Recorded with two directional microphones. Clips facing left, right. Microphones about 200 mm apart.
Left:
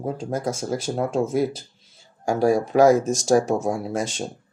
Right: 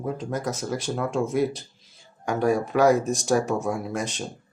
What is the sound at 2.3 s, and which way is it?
Speech, 40° left (ahead or behind).